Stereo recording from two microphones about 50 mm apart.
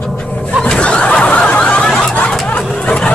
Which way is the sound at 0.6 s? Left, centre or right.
Left.